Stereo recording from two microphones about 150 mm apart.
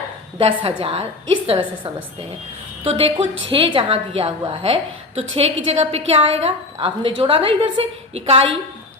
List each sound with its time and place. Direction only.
0.3 s a woman's voice: 40° right (ahead or behind)